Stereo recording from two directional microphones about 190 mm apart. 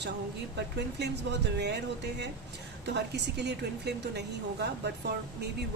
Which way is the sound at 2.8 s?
65° right (ahead or behind).